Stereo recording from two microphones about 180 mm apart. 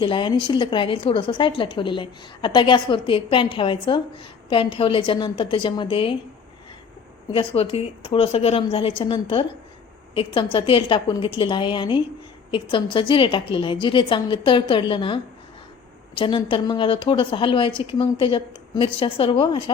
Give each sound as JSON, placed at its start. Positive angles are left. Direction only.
{"t": 0.0, "sound": "a woman's voice", "side_deg": 25}
{"t": 7.3, "sound": "a woman's voice", "side_deg": 30}